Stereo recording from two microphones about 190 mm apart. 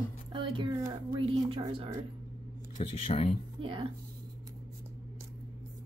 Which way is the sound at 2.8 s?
30° left (ahead or behind).